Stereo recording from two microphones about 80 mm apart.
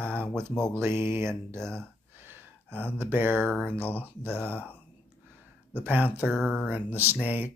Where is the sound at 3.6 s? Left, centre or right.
Left.